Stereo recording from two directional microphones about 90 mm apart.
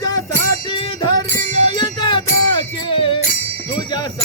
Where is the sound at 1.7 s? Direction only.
60° left (ahead or behind).